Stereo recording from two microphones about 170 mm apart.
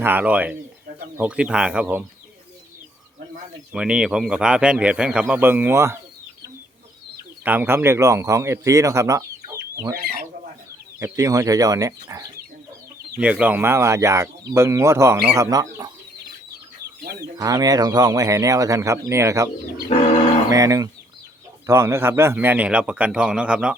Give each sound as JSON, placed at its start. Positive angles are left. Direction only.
{"t": 0.0, "sound": "speech", "side_deg": -10}
{"t": 3.7, "sound": "speech", "side_deg": -5}
{"t": 7.4, "sound": "speech", "side_deg": -10}
{"t": 11.0, "sound": "speech", "side_deg": -20}
{"t": 13.1, "sound": "speech", "side_deg": -5}
{"t": 17.0, "sound": "speech", "side_deg": -70}
{"t": 17.3, "sound": "speech", "side_deg": -20}
{"t": 19.9, "sound": "music", "side_deg": 40}
{"t": 20.5, "sound": "speech", "side_deg": -20}